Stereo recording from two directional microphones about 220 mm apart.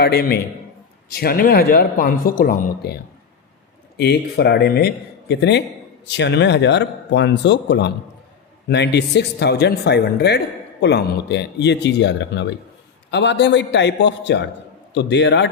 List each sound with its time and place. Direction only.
0.0 s speech: 45° left (ahead or behind)